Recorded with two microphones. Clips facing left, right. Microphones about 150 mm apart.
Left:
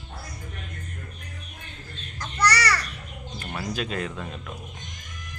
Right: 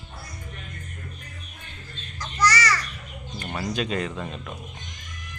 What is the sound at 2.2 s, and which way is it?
Crow, 60° left (ahead or behind).